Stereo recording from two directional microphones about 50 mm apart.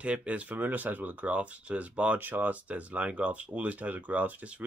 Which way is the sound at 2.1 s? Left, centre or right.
Right.